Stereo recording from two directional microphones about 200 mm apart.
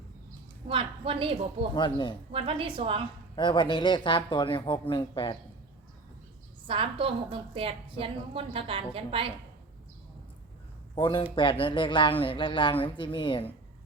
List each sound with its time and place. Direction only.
0.7 s a woman's voice: 25° right (ahead or behind)
1.7 s speech: 25° left (ahead or behind)
2.3 s a woman's voice: 25° right (ahead or behind)
3.3 s speech: 25° left (ahead or behind)
6.7 s a woman's voice: 25° right (ahead or behind)
10.9 s speech: 25° left (ahead or behind)